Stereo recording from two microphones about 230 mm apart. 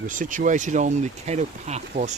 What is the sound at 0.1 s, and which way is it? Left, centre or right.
Speech, right.